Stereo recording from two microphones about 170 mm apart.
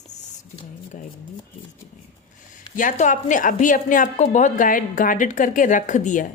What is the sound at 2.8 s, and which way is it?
Speech, 50° left (ahead or behind).